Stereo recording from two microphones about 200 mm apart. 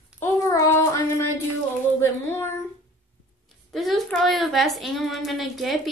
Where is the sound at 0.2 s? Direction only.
15° left (ahead or behind).